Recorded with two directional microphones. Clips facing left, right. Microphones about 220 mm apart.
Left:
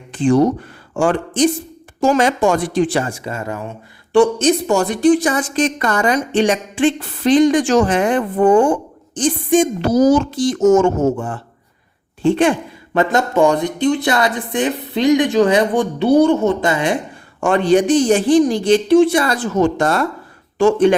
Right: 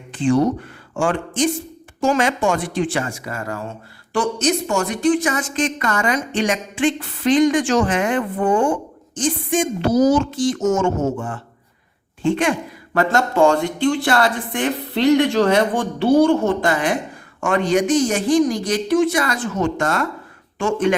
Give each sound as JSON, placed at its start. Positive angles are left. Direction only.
{"t": 0.9, "sound": "a woman's voice", "side_deg": 35}
{"t": 12.2, "sound": "a sound", "side_deg": 35}
{"t": 13.0, "sound": "a woman's voice", "side_deg": 20}